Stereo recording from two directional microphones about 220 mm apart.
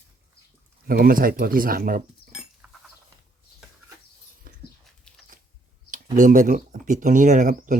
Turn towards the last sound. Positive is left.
turn(degrees=-35)  # may be behind; listen again after turning